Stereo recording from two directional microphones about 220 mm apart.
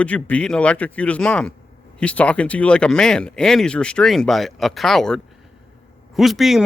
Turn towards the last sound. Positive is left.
turn(degrees=0)  # may be behind; listen again after turning